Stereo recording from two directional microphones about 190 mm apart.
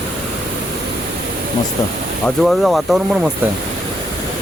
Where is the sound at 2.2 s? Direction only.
Centre (ahead or behind).